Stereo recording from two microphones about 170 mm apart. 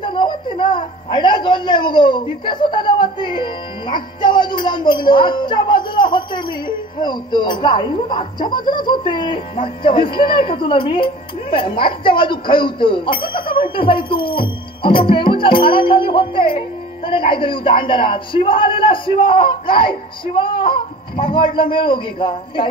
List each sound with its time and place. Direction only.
0.0 s a man's voice: 30° left (ahead or behind)